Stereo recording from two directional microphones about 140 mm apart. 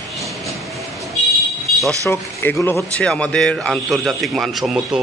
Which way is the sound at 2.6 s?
15° left (ahead or behind).